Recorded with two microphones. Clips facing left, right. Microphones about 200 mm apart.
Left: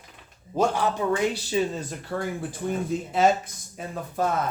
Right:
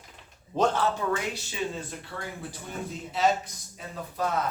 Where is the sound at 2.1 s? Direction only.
50° left (ahead or behind).